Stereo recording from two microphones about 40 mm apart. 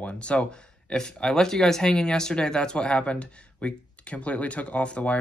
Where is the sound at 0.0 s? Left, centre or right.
Left.